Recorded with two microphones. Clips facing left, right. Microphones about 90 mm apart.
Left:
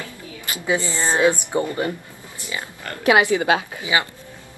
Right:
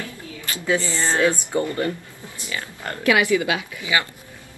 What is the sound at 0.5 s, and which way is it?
Speech, 20° left (ahead or behind).